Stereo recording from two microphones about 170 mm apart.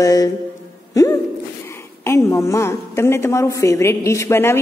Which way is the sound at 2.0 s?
15° left (ahead or behind).